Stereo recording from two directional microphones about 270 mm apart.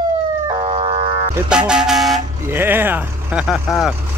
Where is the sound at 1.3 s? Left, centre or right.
Centre.